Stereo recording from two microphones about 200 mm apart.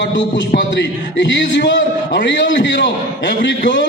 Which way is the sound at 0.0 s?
60° left (ahead or behind).